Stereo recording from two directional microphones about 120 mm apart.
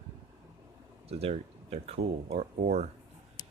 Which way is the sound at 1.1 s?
55° right (ahead or behind).